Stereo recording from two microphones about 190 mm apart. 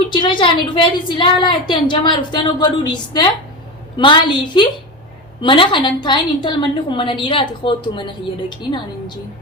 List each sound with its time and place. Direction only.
0.1 s a woman's voice: 25° left (ahead or behind)